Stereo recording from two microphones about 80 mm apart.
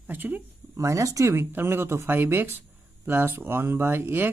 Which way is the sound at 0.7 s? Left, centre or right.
Right.